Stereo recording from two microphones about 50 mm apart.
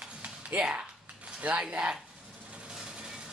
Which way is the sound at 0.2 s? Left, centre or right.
Right.